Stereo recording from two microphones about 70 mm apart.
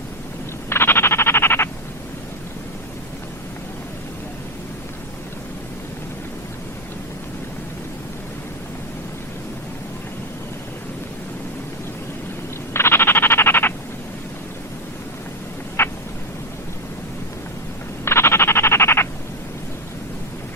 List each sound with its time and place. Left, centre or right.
0.7 s frog: left
12.7 s frog: left
15.8 s a sound: left
18.0 s frog: left